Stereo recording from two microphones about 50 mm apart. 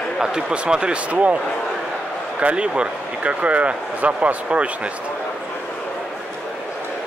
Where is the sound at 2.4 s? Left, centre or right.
Right.